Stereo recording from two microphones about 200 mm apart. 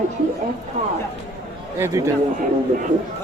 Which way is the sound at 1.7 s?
10° right (ahead or behind).